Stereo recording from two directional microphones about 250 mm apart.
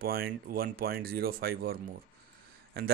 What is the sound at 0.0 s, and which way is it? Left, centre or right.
Speech, right.